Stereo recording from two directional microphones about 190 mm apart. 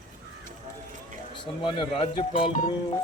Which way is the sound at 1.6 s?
25° left (ahead or behind).